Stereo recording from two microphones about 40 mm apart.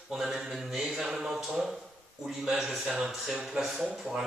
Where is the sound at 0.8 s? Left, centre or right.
Centre.